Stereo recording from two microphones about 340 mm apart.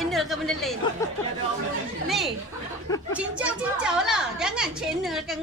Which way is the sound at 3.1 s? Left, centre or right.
Centre.